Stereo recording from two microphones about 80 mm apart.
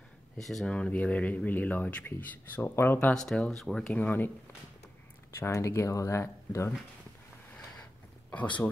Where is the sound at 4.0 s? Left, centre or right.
Left.